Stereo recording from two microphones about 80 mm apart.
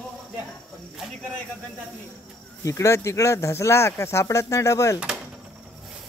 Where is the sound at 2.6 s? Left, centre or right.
Left.